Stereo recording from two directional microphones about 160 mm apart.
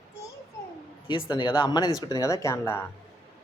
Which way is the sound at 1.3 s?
30° left (ahead or behind).